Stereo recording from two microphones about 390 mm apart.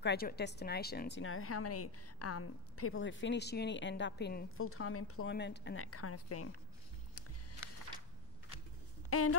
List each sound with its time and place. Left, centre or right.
0.0 s a woman's voice: left
9.1 s speech: left